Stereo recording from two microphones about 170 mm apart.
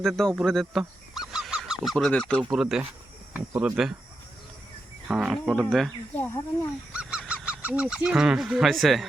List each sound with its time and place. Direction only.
0.0 s goose: 5° left (ahead or behind)
2.5 s speech: 5° right (ahead or behind)
5.0 s speech: 5° right (ahead or behind)
6.9 s goose: 5° right (ahead or behind)